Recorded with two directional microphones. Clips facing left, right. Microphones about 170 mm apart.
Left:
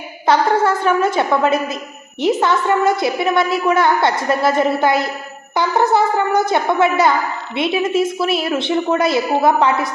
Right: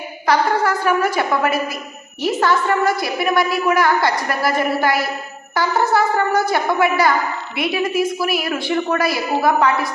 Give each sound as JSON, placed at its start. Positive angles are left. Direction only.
{"t": 0.3, "sound": "a woman's voice", "side_deg": 25}